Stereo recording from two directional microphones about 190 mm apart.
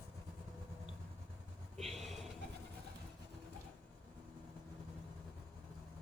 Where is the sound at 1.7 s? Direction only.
Centre (ahead or behind).